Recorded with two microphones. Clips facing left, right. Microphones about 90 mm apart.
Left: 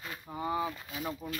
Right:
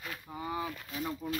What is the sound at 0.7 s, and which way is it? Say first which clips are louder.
Speech: right 1 dB; 10° left (ahead or behind).